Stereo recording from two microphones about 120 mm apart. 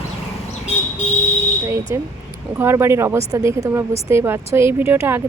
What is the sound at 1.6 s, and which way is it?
A woman's voice, 20° right (ahead or behind).